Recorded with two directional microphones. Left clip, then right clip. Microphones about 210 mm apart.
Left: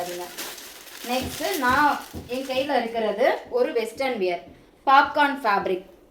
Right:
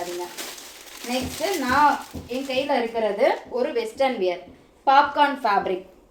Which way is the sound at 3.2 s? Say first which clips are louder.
Left 1 dB; 10° left (ahead or behind).